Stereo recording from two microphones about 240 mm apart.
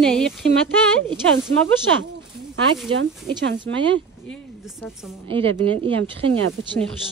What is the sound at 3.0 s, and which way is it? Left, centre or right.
Speech, right.